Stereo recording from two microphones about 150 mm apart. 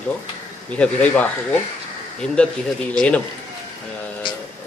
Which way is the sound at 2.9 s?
10° left (ahead or behind).